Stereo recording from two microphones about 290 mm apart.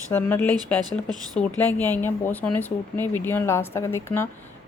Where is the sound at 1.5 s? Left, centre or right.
Centre.